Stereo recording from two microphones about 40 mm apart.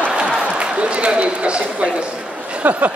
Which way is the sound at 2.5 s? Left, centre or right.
Right.